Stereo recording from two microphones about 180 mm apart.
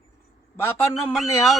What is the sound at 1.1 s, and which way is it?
Speech, centre (ahead or behind).